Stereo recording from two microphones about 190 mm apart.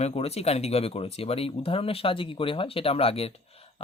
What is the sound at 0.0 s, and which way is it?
Speech, 30° left (ahead or behind).